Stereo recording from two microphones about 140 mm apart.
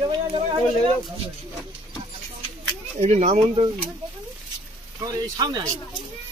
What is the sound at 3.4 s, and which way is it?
Speech, 35° right (ahead or behind).